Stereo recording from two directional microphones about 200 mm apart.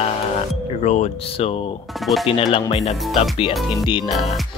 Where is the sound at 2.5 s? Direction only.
30° left (ahead or behind).